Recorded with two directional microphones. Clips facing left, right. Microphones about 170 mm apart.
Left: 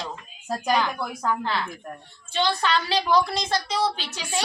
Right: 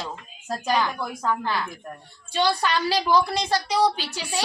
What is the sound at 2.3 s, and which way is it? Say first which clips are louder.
A woman's voice: right 1 dB; 10° right (ahead or behind).